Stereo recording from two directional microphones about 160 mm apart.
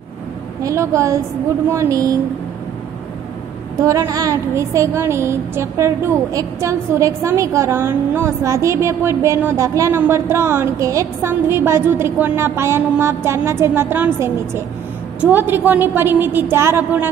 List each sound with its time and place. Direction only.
0.6 s a woman's voice: 20° right (ahead or behind)
3.7 s a woman's voice: 20° right (ahead or behind)